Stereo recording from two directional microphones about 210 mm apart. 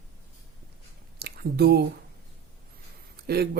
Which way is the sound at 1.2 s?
50° right (ahead or behind).